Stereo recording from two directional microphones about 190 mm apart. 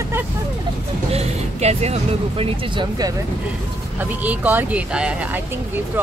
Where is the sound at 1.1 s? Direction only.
35° right (ahead or behind).